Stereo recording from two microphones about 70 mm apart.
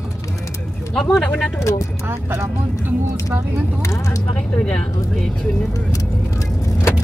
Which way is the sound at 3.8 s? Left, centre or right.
Left.